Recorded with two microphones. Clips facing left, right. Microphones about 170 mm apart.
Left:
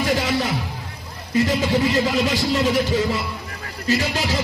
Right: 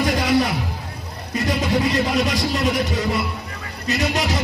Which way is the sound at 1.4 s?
30° left (ahead or behind).